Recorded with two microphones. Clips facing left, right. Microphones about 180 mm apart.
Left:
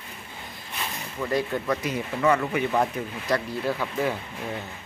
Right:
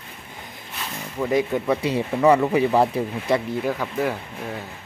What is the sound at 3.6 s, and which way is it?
Speech, 10° right (ahead or behind).